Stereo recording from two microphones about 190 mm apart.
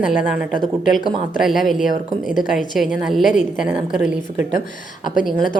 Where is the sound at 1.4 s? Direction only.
Centre (ahead or behind).